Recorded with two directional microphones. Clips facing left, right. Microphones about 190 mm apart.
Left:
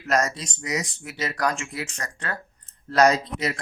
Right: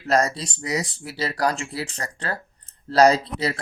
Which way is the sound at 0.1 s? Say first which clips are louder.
Right 3 dB; 30° right (ahead or behind).